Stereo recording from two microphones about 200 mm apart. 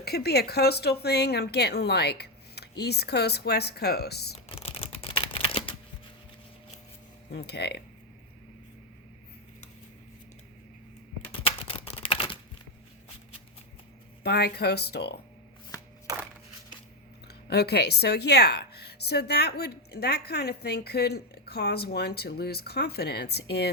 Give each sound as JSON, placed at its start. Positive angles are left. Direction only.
{"t": 0.0, "sound": "speech", "side_deg": 55}
{"t": 4.4, "sound": "computer keyboard", "side_deg": 30}
{"t": 7.3, "sound": "speech", "side_deg": 55}
{"t": 11.3, "sound": "typing", "side_deg": 30}
{"t": 14.3, "sound": "speech", "side_deg": 55}
{"t": 17.2, "sound": "speech", "side_deg": 55}